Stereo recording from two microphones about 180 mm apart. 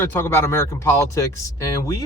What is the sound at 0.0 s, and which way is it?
A woman's voice, 10° left (ahead or behind).